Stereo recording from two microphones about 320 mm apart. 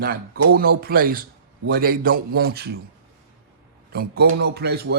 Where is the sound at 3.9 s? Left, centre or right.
Right.